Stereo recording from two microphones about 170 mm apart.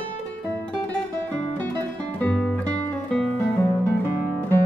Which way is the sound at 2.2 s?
5° left (ahead or behind).